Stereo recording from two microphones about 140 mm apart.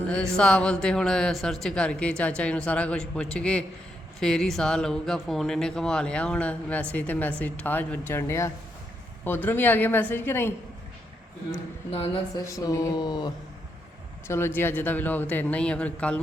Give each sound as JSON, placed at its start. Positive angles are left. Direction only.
{"t": 0.1, "sound": "a man's voice", "side_deg": 5}
{"t": 11.9, "sound": "speech", "side_deg": 40}
{"t": 12.5, "sound": "speech", "side_deg": 25}
{"t": 14.3, "sound": "a man's voice", "side_deg": 15}